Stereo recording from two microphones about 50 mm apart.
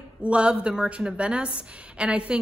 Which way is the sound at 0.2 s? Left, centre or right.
Right.